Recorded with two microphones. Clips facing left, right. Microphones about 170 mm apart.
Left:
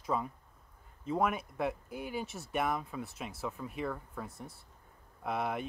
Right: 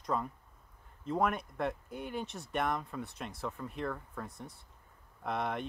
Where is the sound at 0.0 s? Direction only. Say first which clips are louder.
Even; 5° left (ahead or behind).